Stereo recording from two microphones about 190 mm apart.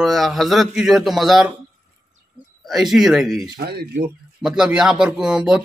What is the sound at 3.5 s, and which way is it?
Speech, 55° right (ahead or behind).